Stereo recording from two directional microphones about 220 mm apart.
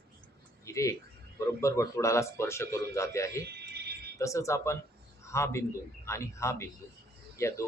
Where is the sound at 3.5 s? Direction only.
45° right (ahead or behind).